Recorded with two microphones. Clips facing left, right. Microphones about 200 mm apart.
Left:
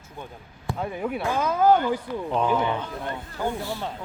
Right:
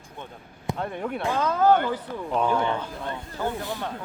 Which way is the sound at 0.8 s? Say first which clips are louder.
Left 2 dB; 5° left (ahead or behind).